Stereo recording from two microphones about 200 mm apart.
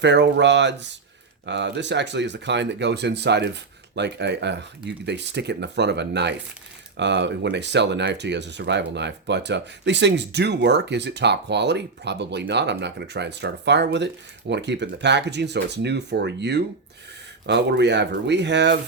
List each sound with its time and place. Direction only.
0.0 s speech: 60° right (ahead or behind)